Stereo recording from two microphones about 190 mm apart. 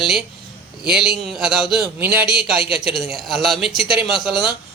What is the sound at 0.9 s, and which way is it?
Speech, centre (ahead or behind).